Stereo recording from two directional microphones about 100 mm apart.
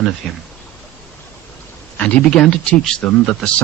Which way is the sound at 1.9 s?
10° left (ahead or behind).